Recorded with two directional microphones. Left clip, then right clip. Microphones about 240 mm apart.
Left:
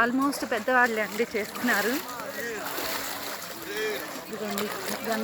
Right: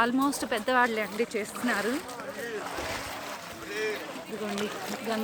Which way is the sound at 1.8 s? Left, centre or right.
Left.